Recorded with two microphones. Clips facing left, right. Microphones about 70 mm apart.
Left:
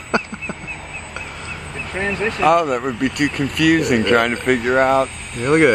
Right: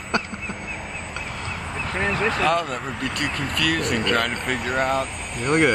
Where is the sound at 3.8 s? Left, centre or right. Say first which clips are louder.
Left 7 dB; centre.